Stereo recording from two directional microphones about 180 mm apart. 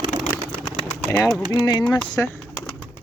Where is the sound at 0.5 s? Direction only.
Centre (ahead or behind).